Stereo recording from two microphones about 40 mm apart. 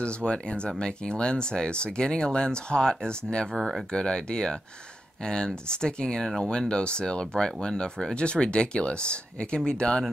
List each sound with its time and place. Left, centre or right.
0.0 s speech: left
3.5 s speech: centre
3.9 s speech: left